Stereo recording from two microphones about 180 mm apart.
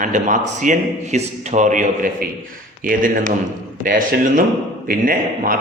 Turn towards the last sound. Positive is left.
turn(degrees=-50)  # may be behind; listen again after turning